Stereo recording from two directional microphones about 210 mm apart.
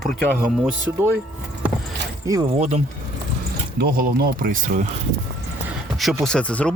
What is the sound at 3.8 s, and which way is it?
Speech, 45° right (ahead or behind).